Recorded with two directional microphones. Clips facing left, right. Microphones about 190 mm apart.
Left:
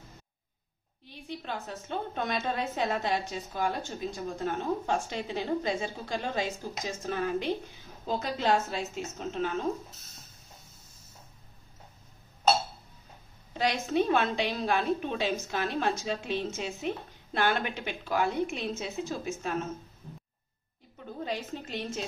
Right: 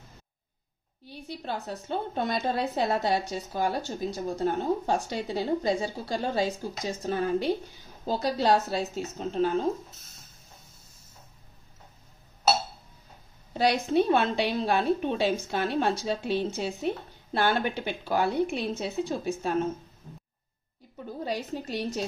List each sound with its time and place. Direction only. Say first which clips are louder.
1.0 s a woman's voice: right 3 dB; 40° right (ahead or behind)
13.5 s a woman's voice: right 4 dB; 35° right (ahead or behind)
21.2 s a woman's voice: right 3 dB; 40° right (ahead or behind)